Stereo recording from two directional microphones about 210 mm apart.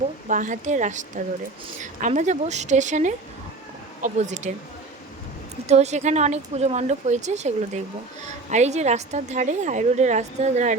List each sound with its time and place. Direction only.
0.3 s a woman's voice: 40° right (ahead or behind)
5.6 s a woman's voice: 30° right (ahead or behind)